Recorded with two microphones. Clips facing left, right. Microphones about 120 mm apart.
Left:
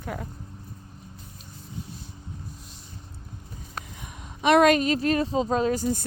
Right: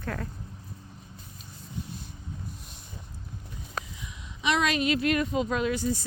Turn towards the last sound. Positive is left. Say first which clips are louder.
# left 3 dB
turn(degrees=45)  # may be behind; listen again after turning